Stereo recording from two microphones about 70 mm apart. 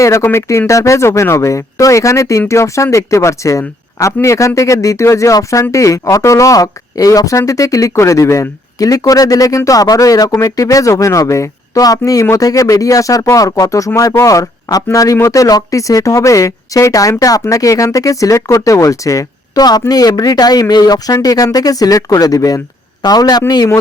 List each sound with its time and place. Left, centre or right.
0.0 s speech: left
19.9 s speech: left
23.0 s a man's voice: left